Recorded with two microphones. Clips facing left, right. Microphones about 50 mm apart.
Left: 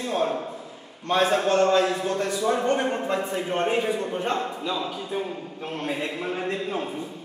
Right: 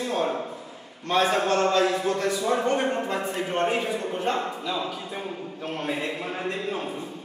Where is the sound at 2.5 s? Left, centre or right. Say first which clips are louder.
Even; right.